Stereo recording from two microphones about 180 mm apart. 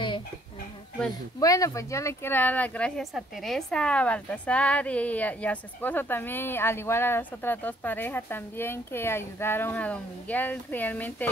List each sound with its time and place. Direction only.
1.4 s speech: 20° left (ahead or behind)